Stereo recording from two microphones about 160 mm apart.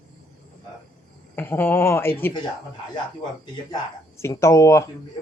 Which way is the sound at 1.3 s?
10° left (ahead or behind).